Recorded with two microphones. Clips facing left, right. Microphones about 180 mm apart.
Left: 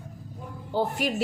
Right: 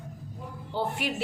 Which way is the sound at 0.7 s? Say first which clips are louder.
Left 4 dB; 40° left (ahead or behind).